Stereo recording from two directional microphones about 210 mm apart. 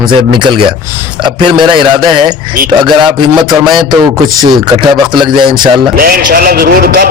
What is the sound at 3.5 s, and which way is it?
Speech, 20° right (ahead or behind).